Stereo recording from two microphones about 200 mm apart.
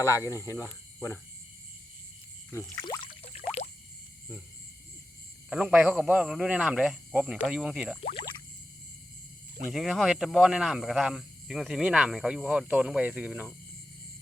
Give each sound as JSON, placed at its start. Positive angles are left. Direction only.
{"t": 0.1, "sound": "speech", "side_deg": 15}
{"t": 0.6, "sound": "speech", "side_deg": -5}
{"t": 2.5, "sound": "a sound", "side_deg": 15}
{"t": 5.5, "sound": "speech", "side_deg": -5}
{"t": 9.7, "sound": "speech", "side_deg": 0}